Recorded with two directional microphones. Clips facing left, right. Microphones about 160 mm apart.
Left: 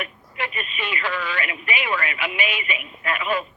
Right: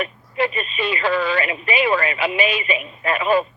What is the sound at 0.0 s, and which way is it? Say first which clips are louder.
Speech: right 9 dB; 30° right (ahead or behind).